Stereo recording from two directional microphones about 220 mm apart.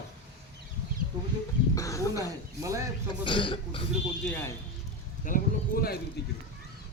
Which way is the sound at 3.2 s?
25° left (ahead or behind).